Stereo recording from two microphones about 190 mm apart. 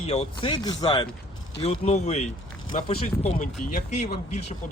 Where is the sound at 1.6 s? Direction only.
35° left (ahead or behind).